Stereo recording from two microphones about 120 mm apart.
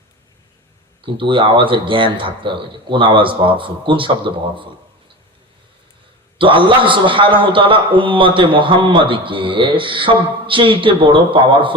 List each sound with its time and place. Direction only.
1.0 s a man's voice: 45° right (ahead or behind)
6.4 s a man's voice: 45° right (ahead or behind)